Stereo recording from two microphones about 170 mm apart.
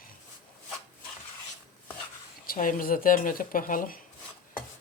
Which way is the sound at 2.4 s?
55° left (ahead or behind).